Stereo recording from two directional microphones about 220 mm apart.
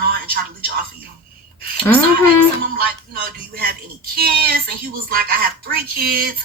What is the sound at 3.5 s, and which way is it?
Speech, 45° right (ahead or behind).